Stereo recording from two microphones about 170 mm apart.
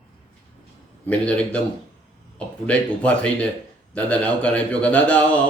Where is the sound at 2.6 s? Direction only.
5° left (ahead or behind).